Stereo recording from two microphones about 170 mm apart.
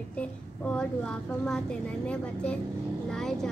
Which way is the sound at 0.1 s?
5° left (ahead or behind).